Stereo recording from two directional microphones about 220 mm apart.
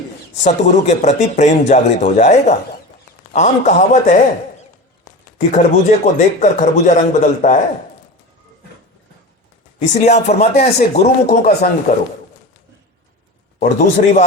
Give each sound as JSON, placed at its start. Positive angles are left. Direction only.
{"t": 0.4, "sound": "speech", "side_deg": 30}
{"t": 5.4, "sound": "speech", "side_deg": 35}
{"t": 9.7, "sound": "speech", "side_deg": 30}
{"t": 13.6, "sound": "speech", "side_deg": 35}